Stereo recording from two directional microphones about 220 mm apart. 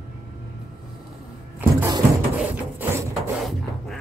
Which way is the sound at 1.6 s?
10° right (ahead or behind).